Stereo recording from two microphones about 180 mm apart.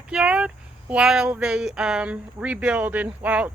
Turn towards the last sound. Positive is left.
turn(degrees=-10)  # may be behind; listen again after turning